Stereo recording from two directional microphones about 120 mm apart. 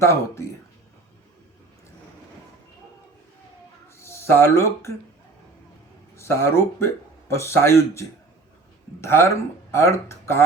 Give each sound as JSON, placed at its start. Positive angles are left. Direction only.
{"t": 0.0, "sound": "speech", "side_deg": 25}
{"t": 3.9, "sound": "speech", "side_deg": 20}
{"t": 6.1, "sound": "speech", "side_deg": 20}